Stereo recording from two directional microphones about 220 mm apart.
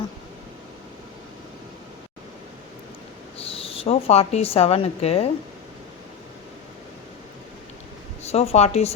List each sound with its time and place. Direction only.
3.3 s speech: 25° left (ahead or behind)
8.2 s speech: 30° left (ahead or behind)